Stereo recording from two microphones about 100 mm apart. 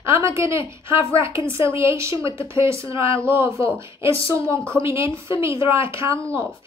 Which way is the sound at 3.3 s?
25° right (ahead or behind).